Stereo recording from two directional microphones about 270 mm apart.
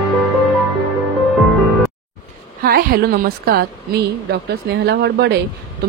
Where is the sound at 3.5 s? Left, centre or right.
Right.